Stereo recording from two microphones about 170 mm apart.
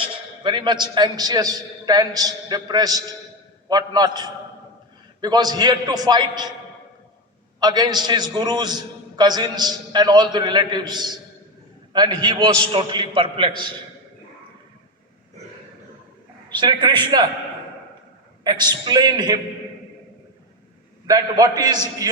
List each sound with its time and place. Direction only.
0.0 s a man's voice: 25° right (ahead or behind)
7.6 s a man's voice: 25° right (ahead or behind)
16.5 s a man's voice: 25° right (ahead or behind)
18.4 s a man's voice: 25° right (ahead or behind)
21.1 s a man's voice: 20° right (ahead or behind)